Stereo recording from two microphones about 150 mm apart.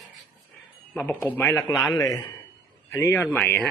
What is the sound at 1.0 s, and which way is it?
A man's voice, 10° left (ahead or behind).